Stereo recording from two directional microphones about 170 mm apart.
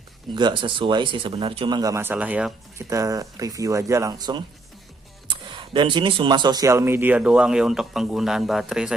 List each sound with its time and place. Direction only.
0.3 s speech: 30° right (ahead or behind); by 8.9 s 5° right (ahead or behind)